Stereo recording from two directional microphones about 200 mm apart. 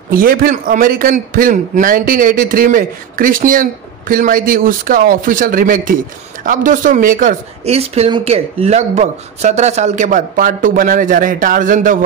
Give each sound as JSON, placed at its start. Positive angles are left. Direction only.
{"t": 0.1, "sound": "a man's voice", "side_deg": -45}